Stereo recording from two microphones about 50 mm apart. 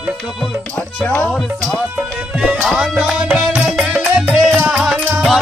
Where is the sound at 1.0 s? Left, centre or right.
Left.